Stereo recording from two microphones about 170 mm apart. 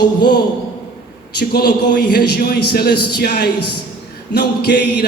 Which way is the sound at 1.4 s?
65° left (ahead or behind).